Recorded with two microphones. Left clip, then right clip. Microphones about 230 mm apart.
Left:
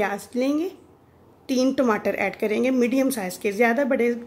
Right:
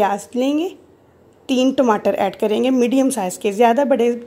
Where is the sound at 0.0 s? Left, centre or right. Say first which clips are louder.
Right 6 dB; centre.